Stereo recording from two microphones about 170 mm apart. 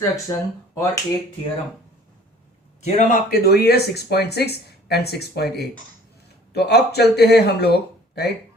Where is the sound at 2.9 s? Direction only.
50° left (ahead or behind); by 8.3 s 70° left (ahead or behind).